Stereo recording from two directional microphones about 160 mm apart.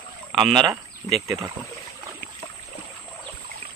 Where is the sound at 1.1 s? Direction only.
Centre (ahead or behind).